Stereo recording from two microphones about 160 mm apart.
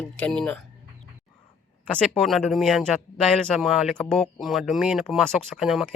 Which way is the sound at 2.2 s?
Centre (ahead or behind).